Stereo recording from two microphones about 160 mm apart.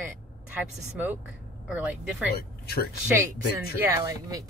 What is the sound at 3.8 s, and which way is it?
Speech, 20° right (ahead or behind).